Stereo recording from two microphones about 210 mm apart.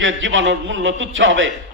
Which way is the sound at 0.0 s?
65° right (ahead or behind).